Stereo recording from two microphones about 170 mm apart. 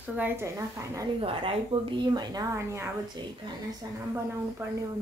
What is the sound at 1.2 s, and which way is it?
A woman's voice, 35° right (ahead or behind).